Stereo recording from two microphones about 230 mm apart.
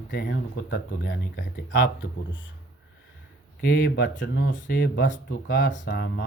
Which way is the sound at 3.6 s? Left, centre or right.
Left.